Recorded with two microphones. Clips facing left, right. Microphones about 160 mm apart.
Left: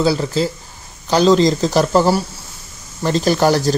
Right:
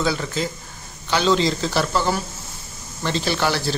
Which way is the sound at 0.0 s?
35° left (ahead or behind).